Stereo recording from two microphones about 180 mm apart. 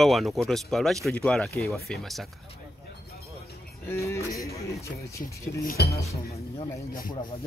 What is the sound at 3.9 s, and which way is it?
Speech, 15° left (ahead or behind).